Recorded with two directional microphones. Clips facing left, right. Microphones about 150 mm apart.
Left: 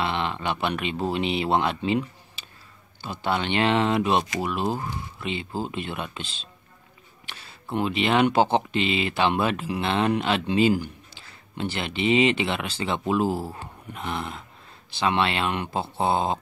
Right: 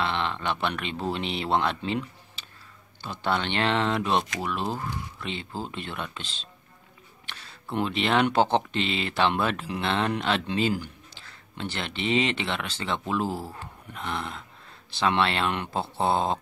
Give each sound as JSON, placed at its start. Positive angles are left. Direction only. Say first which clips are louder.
{"t": 0.0, "sound": "speech", "louder": "left 1 dB", "side_deg": 10}
{"t": 7.2, "sound": "a sound", "louder": "left 1 dB", "side_deg": 5}
{"t": 7.7, "sound": "speech", "louder": "left 2 dB", "side_deg": 5}